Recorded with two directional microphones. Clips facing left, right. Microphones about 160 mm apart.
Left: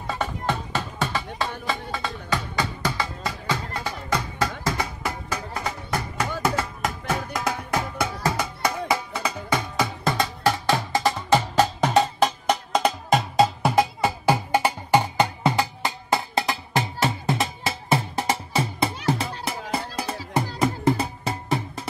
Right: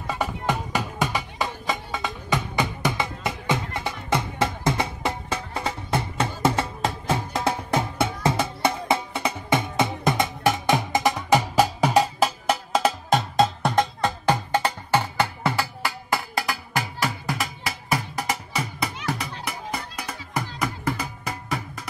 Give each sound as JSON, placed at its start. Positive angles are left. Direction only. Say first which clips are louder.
{"t": 0.0, "sound": "music", "louder": "right 1 dB", "side_deg": -10}